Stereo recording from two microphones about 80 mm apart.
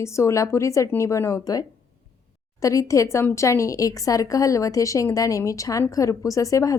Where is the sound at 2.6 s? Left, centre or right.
Left.